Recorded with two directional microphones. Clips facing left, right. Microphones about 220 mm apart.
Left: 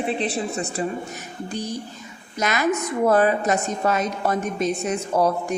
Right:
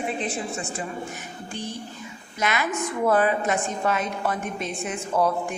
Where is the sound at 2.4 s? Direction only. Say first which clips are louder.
Left 4 dB; 40° left (ahead or behind).